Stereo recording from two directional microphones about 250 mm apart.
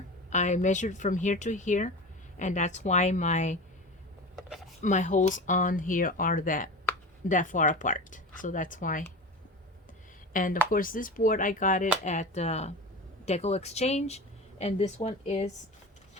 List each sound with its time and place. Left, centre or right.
0.3 s speech: left
4.4 s a sound: centre
4.8 s speech: left
10.3 s speech: left